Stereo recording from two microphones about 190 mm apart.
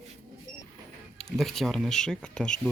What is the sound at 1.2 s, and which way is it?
Speech, centre (ahead or behind).